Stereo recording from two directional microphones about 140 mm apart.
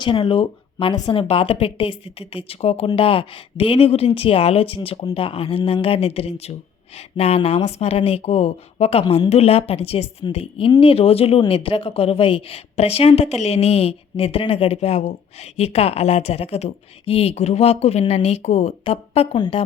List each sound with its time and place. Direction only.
0.0 s speech: 35° left (ahead or behind)